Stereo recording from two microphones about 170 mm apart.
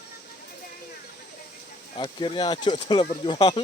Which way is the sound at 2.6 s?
40° left (ahead or behind).